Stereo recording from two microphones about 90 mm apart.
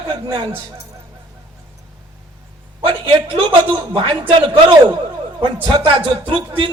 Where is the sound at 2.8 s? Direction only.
75° right (ahead or behind).